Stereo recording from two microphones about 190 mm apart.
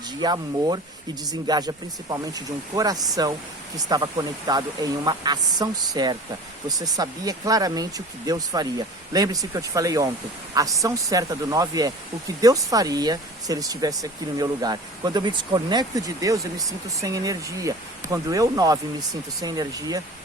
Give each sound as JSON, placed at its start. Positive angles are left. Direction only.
{"t": 0.2, "sound": "speech", "side_deg": -20}